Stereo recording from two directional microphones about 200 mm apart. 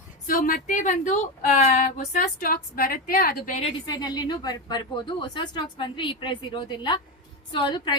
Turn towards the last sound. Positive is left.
turn(degrees=25)  # may be behind; listen again after turning